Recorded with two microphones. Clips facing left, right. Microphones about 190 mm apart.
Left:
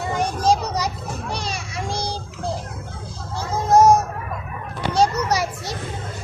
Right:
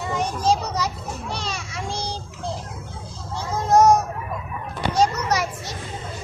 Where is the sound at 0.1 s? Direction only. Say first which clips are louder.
Left 2 dB; 10° left (ahead or behind).